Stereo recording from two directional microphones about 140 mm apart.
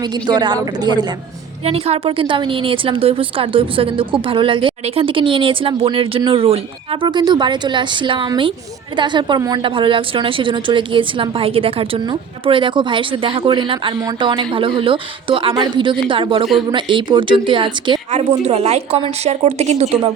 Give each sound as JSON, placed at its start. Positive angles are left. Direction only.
{"t": 0.0, "sound": "a woman's voice", "side_deg": -30}
{"t": 1.6, "sound": "a woman's voice", "side_deg": -45}
{"t": 18.1, "sound": "a woman's voice", "side_deg": -50}